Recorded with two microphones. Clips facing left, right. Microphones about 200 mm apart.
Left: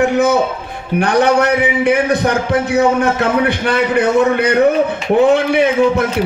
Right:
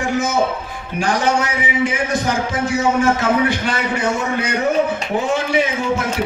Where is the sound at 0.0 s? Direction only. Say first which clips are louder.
Left 6 dB; 60° left (ahead or behind).